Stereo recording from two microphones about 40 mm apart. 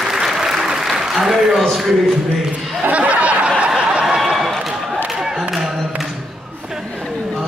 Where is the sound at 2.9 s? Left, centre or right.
Right.